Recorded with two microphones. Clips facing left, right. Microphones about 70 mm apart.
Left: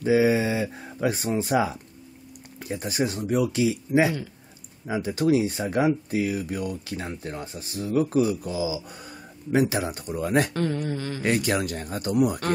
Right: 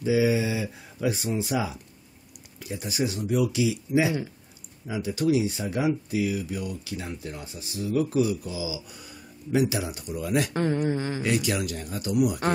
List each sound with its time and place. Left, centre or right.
0.0 s speech: left
10.5 s speech: right
11.2 s speech: left